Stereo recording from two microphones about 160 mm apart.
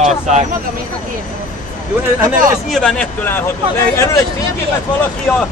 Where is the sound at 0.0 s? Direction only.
45° right (ahead or behind).